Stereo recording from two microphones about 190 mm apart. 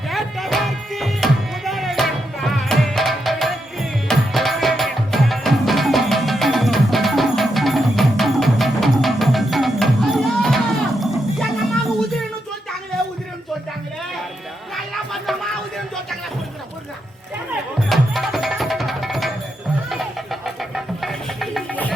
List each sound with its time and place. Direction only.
0.1 s music: centre (ahead or behind)
14.8 s music: centre (ahead or behind)
17.8 s music: centre (ahead or behind)